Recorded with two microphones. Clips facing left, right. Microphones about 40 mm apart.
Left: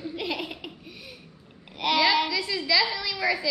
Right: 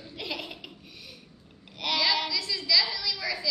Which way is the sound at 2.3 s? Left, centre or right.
Left.